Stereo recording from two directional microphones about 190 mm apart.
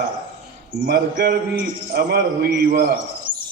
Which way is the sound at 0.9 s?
55° right (ahead or behind).